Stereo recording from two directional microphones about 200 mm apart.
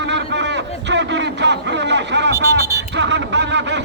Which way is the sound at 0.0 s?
60° right (ahead or behind).